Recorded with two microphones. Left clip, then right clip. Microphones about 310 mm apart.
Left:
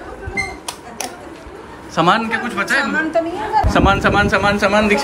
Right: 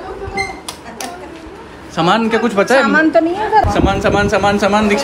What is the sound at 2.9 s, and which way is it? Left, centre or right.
Speech, right.